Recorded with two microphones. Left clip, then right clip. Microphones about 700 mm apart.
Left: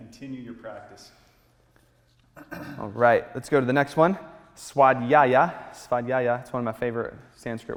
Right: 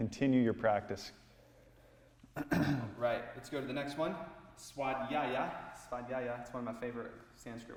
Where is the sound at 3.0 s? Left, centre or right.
Left.